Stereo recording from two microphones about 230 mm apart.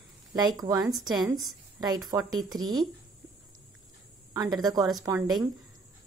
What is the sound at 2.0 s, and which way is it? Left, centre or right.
Speech, centre.